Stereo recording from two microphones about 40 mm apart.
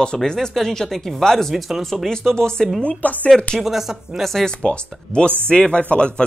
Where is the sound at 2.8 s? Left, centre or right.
Left.